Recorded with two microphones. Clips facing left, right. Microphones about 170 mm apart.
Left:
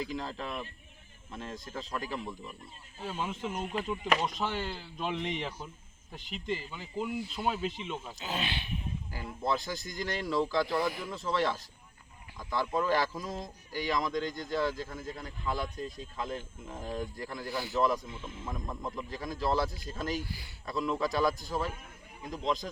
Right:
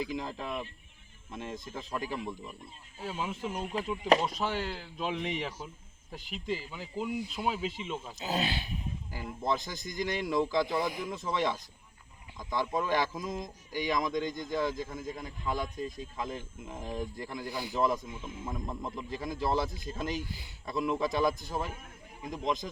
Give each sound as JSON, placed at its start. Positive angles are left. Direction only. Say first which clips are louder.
{"t": 0.2, "sound": "a man's voice", "louder": "right 1 dB", "side_deg": -15}
{"t": 8.2, "sound": "speech", "louder": "right 6 dB", "side_deg": -40}
{"t": 9.4, "sound": "a man's voice", "louder": "even", "side_deg": -20}
{"t": 18.4, "sound": "speech", "louder": "right 1 dB", "side_deg": -25}